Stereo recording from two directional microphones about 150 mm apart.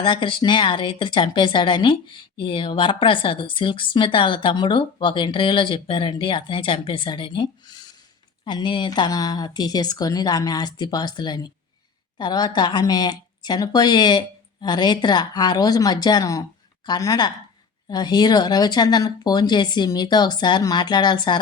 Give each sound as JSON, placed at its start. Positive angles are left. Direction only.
{"t": 0.0, "sound": "a woman's voice", "side_deg": 35}